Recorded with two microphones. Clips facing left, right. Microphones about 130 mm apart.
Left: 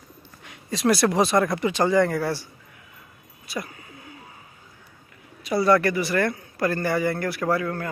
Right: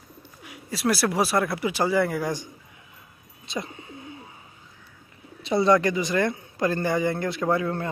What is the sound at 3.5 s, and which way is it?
Bird, 25° right (ahead or behind).